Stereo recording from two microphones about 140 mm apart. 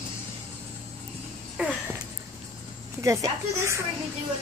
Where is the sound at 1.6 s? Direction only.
10° right (ahead or behind).